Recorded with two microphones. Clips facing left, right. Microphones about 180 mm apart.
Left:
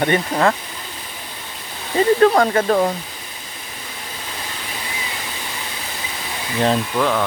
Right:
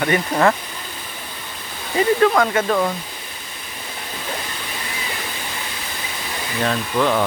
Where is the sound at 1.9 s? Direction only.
35° left (ahead or behind).